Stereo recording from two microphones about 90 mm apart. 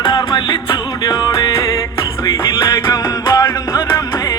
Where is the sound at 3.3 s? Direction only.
40° left (ahead or behind).